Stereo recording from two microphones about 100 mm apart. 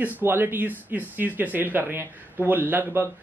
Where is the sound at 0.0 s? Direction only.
20° right (ahead or behind).